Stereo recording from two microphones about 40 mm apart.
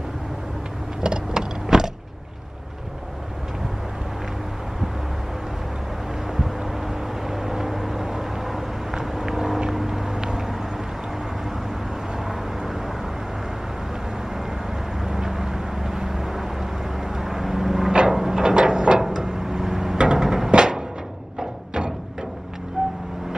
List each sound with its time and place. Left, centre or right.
1.0 s vehicle: centre
6.3 s vehicle: centre
12.3 s vehicle: centre
15.0 s vehicle: centre
17.9 s a sound: centre
20.0 s music: centre
22.8 s vehicle: centre